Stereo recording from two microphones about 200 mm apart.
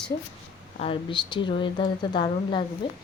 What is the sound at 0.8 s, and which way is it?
A woman's voice, 25° left (ahead or behind).